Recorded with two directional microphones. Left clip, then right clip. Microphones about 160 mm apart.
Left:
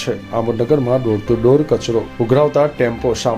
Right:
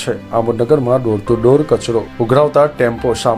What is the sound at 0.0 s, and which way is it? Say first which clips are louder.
Speech: right 3 dB; centre (ahead or behind).